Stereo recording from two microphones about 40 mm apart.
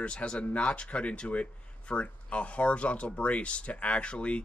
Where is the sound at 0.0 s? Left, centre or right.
Left.